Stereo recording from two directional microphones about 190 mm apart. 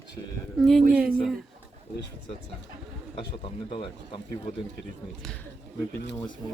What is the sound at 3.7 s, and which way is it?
Speech, 25° left (ahead or behind).